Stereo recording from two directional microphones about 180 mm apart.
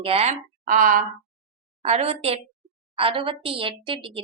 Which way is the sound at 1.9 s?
35° right (ahead or behind).